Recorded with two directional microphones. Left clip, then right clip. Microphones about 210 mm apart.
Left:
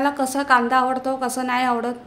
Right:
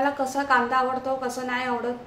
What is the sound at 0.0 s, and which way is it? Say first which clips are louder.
A woman's voice: left 3 dB; 50° left (ahead or behind).